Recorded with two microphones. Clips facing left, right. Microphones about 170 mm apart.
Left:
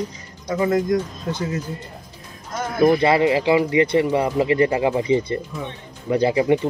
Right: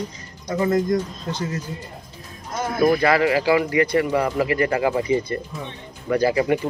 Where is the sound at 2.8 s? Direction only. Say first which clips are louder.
Left 2 dB; 25° left (ahead or behind).